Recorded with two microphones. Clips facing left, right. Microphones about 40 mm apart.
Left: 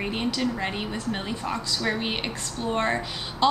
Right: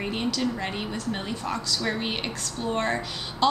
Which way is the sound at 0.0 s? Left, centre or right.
Centre.